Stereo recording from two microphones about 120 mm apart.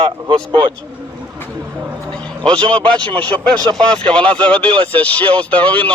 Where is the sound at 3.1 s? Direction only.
10° left (ahead or behind).